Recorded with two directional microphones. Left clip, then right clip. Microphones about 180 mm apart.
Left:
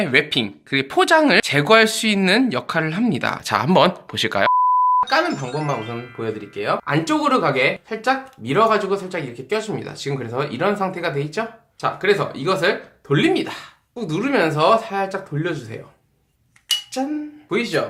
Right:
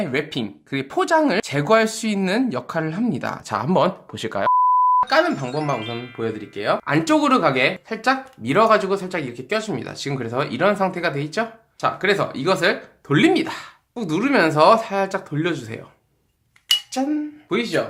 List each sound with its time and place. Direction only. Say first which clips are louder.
0.0 s speech: left 6 dB; centre (ahead or behind)
5.0 s speech: right 1 dB; 20° right (ahead or behind)
5.5 s speech: even; 5° left (ahead or behind)
6.1 s speech: left 1 dB; 20° right (ahead or behind)
16.9 s a sound: right 1 dB; 35° right (ahead or behind)